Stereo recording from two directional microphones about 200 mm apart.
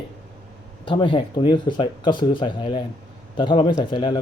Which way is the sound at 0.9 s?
25° left (ahead or behind).